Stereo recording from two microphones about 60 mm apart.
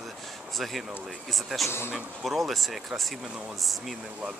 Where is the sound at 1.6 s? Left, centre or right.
Left.